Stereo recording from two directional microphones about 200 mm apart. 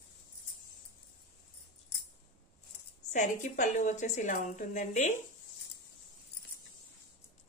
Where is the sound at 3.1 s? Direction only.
35° left (ahead or behind).